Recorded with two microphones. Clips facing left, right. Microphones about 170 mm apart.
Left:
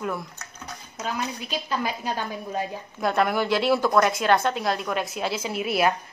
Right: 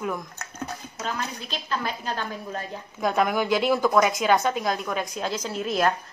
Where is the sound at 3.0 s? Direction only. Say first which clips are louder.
Even; centre (ahead or behind).